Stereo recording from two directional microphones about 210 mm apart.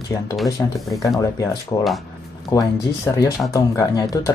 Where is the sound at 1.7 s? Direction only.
15° left (ahead or behind).